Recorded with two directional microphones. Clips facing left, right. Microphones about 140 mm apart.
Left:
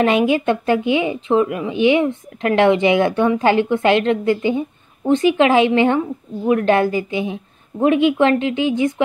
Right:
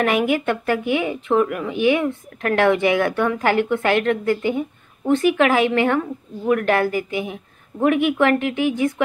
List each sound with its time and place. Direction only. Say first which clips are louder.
0.0 s a woman's voice: left 3 dB; 25° left (ahead or behind)